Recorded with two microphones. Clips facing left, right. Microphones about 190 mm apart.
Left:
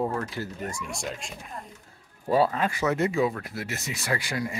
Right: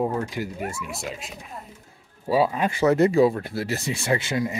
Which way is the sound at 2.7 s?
35° right (ahead or behind).